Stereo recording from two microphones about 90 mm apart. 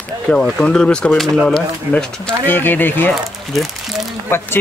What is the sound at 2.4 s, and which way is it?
Speech, 20° left (ahead or behind).